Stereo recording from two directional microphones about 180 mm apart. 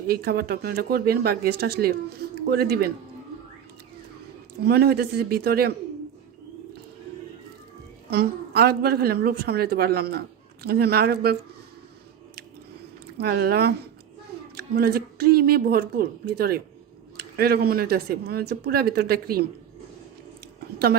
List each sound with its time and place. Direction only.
0.1 s a woman's voice: 60° right (ahead or behind)
4.6 s a woman's voice: 60° right (ahead or behind)
8.1 s a woman's voice: 60° right (ahead or behind)
13.1 s a woman's voice: 60° right (ahead or behind)